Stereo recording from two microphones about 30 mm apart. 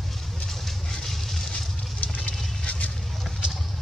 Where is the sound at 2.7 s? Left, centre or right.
Left.